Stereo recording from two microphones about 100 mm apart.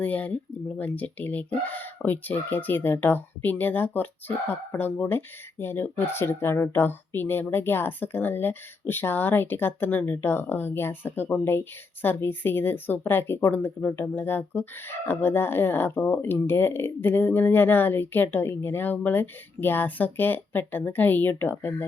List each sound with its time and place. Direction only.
0.0 s speech: 15° left (ahead or behind)